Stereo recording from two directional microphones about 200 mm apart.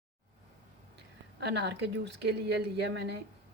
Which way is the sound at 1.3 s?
55° right (ahead or behind).